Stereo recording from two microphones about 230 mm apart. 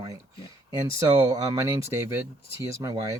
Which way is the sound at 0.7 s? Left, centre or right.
Centre.